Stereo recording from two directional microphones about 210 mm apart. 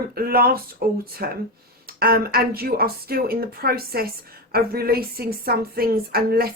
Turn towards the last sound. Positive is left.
turn(degrees=-45)  # may be behind; listen again after turning